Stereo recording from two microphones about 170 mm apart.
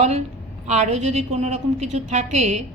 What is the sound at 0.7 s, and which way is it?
A woman's voice, 40° right (ahead or behind).